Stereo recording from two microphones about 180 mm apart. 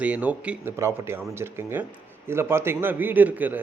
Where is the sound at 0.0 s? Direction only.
10° right (ahead or behind).